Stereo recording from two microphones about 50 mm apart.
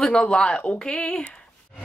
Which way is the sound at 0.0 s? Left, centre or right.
Centre.